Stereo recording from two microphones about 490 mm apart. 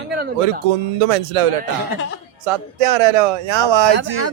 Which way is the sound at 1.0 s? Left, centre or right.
Right.